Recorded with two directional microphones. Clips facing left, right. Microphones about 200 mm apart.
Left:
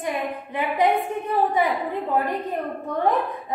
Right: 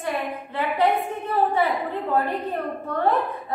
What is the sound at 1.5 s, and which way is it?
A woman's voice, 15° left (ahead or behind).